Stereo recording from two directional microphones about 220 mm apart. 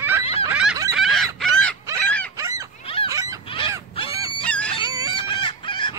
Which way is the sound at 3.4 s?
25° left (ahead or behind).